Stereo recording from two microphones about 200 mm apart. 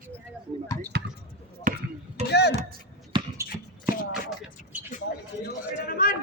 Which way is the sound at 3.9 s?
45° left (ahead or behind).